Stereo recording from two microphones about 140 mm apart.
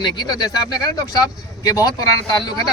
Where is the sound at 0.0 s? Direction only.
30° left (ahead or behind).